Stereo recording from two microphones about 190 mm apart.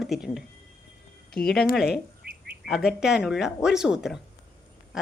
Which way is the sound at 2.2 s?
55° right (ahead or behind).